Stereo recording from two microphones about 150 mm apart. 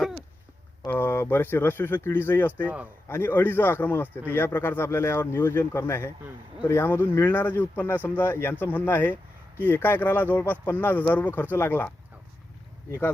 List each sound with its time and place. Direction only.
0.9 s speech: 15° left (ahead or behind)